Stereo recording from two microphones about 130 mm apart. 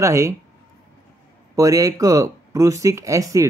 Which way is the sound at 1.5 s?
25° right (ahead or behind).